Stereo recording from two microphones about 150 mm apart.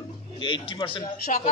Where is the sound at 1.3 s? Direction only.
55° left (ahead or behind).